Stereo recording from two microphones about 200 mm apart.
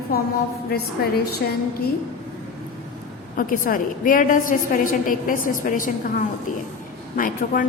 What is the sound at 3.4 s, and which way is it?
A woman's voice, 45° left (ahead or behind).